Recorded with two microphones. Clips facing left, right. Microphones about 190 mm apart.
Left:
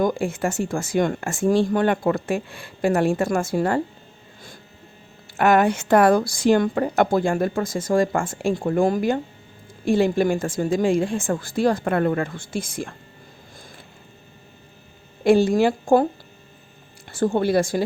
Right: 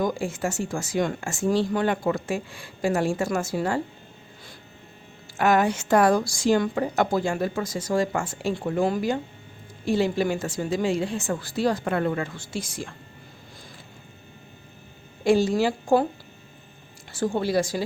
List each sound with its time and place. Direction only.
0.0 s speech: 55° left (ahead or behind)
5.4 s a woman's voice: 60° left (ahead or behind)
15.2 s speech: 55° left (ahead or behind)
17.1 s speech: 55° left (ahead or behind)